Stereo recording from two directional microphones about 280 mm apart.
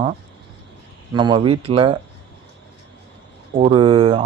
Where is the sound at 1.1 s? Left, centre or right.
Centre.